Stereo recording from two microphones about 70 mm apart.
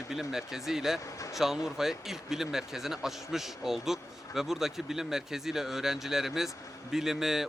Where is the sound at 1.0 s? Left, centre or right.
Left.